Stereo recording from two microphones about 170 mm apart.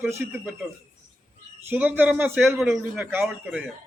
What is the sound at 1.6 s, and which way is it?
A man's voice, 10° right (ahead or behind).